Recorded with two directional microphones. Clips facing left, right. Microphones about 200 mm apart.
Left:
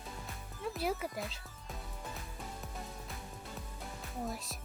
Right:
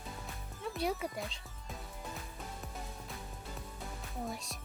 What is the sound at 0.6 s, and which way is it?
Speech, centre (ahead or behind).